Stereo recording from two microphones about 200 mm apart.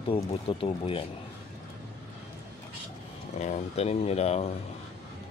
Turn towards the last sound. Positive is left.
turn(degrees=30)  # may be behind; listen again after turning